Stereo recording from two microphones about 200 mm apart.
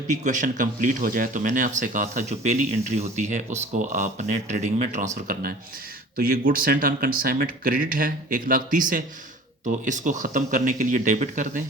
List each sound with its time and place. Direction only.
0.1 s speech: 40° right (ahead or behind)